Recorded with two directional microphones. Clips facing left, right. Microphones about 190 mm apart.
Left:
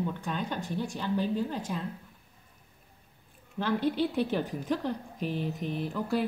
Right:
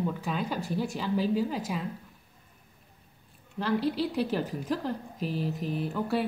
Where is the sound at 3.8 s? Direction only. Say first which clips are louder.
Left 1 dB; 35° right (ahead or behind).